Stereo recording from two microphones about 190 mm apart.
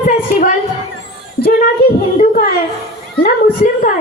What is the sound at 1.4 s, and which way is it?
Speech, 50° left (ahead or behind).